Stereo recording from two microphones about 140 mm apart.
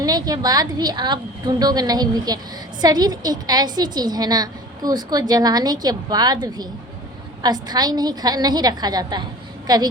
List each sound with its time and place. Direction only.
0.0 s a woman's voice: 25° right (ahead or behind)